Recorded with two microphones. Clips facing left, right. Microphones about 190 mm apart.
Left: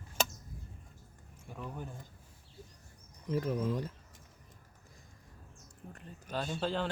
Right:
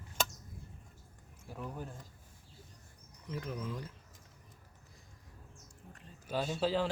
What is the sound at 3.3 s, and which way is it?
Speech, 40° left (ahead or behind).